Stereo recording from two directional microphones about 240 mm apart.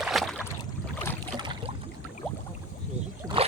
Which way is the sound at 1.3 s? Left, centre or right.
Centre.